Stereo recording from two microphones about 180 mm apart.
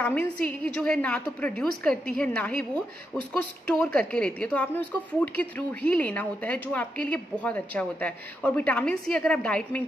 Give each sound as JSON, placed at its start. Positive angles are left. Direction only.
{"t": 0.0, "sound": "a woman's voice", "side_deg": 10}